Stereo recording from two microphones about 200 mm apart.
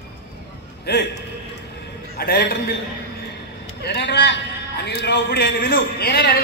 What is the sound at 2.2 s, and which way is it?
Speech, 55° left (ahead or behind).